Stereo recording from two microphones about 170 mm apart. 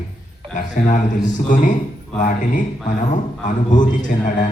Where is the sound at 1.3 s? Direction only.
50° left (ahead or behind).